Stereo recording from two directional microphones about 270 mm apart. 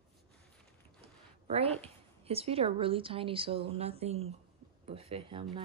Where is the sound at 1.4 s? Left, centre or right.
Right.